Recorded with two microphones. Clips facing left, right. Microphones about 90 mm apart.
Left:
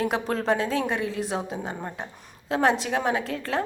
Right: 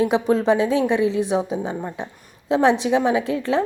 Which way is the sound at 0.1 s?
15° right (ahead or behind).